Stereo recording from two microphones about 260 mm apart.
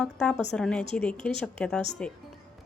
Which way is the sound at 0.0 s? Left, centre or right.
Centre.